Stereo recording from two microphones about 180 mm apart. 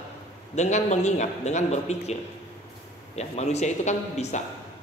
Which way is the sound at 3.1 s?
40° left (ahead or behind).